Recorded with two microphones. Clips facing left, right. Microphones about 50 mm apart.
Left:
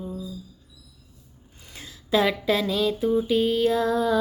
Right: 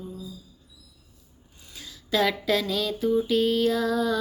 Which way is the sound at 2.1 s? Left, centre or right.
Centre.